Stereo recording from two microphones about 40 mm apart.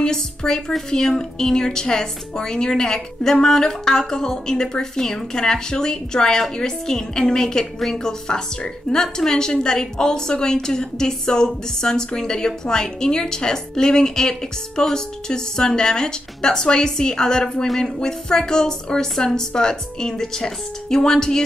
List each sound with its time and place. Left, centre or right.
0.0 s a woman's voice: centre